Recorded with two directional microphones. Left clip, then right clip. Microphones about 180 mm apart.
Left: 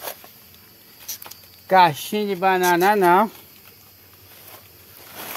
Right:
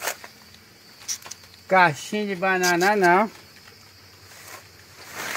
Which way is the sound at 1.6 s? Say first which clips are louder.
Left 3 dB; 15° left (ahead or behind).